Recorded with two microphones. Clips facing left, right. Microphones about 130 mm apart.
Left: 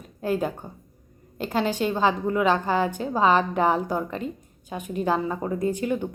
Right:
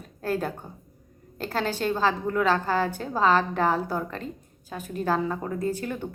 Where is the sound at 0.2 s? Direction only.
10° left (ahead or behind).